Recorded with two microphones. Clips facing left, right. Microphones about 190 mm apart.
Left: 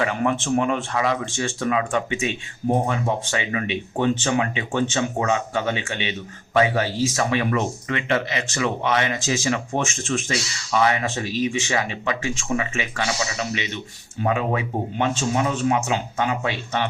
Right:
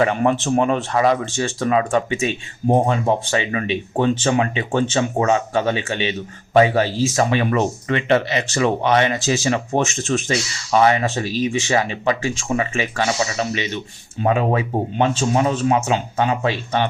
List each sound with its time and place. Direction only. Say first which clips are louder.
0.0 s speech: right 5 dB; 30° right (ahead or behind)